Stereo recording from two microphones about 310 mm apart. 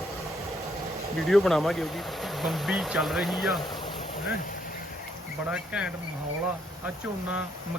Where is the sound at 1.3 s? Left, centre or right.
Centre.